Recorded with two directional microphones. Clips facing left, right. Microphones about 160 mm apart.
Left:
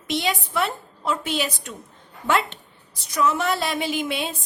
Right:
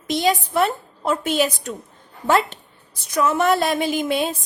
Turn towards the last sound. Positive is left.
turn(degrees=-45)  # may be behind; listen again after turning